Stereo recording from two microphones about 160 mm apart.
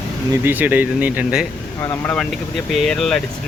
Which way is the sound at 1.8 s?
10° left (ahead or behind).